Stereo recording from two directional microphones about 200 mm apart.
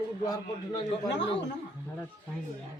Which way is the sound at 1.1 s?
60° left (ahead or behind).